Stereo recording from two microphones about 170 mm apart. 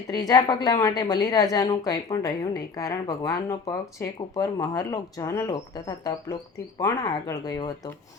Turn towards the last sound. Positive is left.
turn(degrees=20)  # may be behind; listen again after turning